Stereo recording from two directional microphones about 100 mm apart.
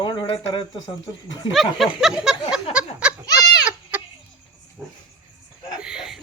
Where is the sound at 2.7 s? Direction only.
10° right (ahead or behind).